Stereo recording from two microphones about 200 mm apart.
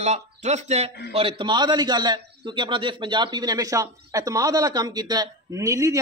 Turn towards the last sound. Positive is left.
turn(degrees=-15)  # may be behind; listen again after turning